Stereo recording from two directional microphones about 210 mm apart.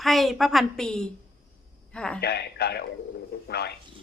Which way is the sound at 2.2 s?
50° left (ahead or behind).